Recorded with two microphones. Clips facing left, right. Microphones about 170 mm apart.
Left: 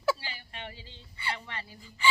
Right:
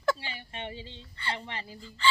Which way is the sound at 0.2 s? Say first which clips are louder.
Right 3 dB; 25° right (ahead or behind).